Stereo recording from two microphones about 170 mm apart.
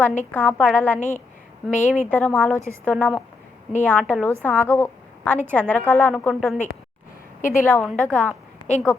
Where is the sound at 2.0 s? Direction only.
10° left (ahead or behind).